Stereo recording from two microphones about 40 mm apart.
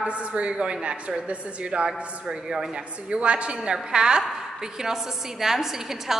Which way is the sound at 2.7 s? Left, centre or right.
Right.